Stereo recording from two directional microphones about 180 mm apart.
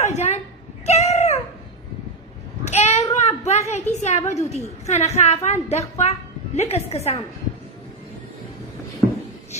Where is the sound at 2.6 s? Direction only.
35° left (ahead or behind).